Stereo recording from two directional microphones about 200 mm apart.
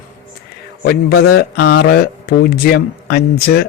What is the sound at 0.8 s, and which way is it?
Speech, 50° left (ahead or behind).